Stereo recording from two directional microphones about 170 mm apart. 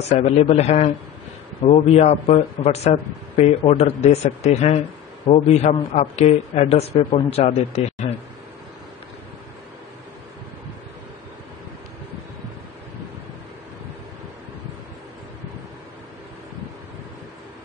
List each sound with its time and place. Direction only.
0.0 s a man's voice: 40° left (ahead or behind)